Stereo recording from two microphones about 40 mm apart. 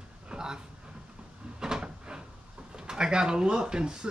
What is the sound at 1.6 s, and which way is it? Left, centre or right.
Cupboard open or close, centre.